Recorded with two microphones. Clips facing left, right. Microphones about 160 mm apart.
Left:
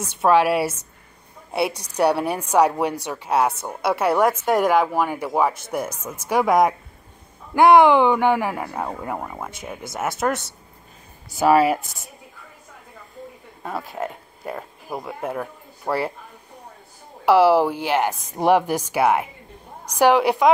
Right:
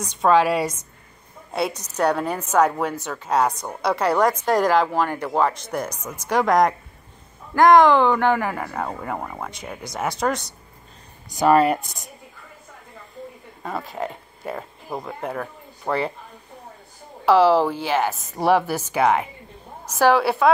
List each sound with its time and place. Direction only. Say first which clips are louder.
0.2 s a woman's voice: left 1 dB; 5° left (ahead or behind)
13.6 s speech: even; centre (ahead or behind)
17.2 s a woman's voice: left 1 dB; 10° left (ahead or behind)